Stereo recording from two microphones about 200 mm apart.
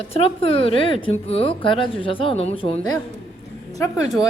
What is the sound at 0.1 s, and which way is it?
A woman's voice, 30° left (ahead or behind).